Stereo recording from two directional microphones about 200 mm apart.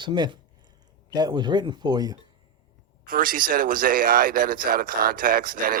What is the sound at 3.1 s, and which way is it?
Speech, 45° right (ahead or behind).